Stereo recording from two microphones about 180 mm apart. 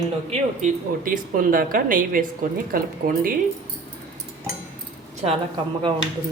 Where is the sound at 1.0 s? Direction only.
50° right (ahead or behind).